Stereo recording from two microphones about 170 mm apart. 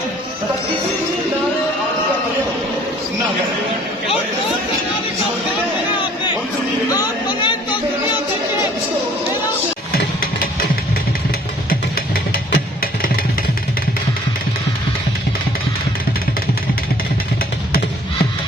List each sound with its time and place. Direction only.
6.9 s chatter: 20° left (ahead or behind)
12.5 s music: 60° left (ahead or behind)